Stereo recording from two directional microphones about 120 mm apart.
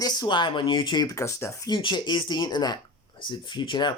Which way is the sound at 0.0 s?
35° left (ahead or behind).